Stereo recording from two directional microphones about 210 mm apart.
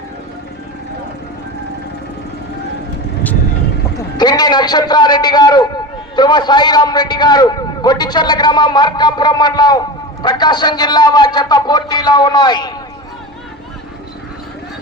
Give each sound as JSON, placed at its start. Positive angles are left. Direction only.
{"t": 3.9, "sound": "a man's voice", "side_deg": 20}